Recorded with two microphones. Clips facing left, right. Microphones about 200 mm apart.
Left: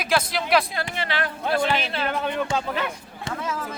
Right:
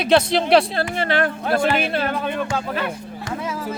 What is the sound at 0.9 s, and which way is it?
Speech, 50° right (ahead or behind).